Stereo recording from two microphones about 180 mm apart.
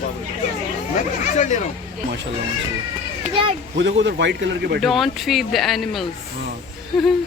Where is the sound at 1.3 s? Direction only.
40° left (ahead or behind).